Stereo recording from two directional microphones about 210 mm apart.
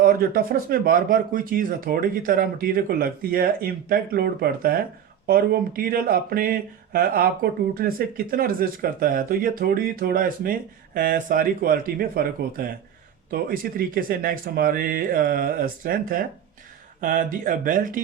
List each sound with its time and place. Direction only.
0.0 s speech: 45° right (ahead or behind)